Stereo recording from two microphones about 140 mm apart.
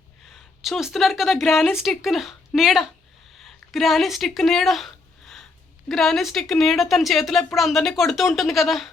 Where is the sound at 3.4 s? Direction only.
Centre (ahead or behind).